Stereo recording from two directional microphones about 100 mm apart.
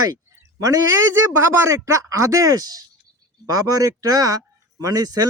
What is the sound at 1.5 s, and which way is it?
Speech, 30° right (ahead or behind).